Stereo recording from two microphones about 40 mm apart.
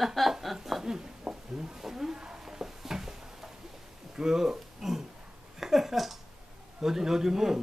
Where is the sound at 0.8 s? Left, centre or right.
Centre.